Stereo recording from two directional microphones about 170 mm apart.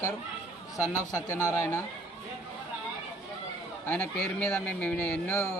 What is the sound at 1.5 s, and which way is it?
Speech, 15° left (ahead or behind).